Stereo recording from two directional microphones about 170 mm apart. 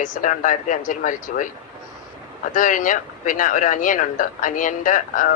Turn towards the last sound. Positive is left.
turn(degrees=50)  # may be behind; listen again after turning